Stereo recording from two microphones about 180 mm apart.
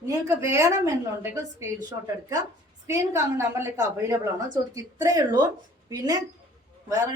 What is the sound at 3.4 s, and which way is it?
A woman's voice, 15° right (ahead or behind).